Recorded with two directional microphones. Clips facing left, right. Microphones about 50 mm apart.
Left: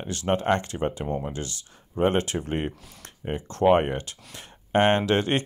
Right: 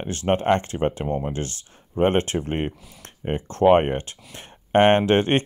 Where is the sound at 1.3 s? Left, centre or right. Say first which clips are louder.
Right 4 dB; right.